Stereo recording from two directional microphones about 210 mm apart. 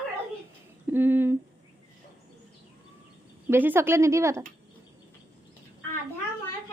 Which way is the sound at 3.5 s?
10° right (ahead or behind).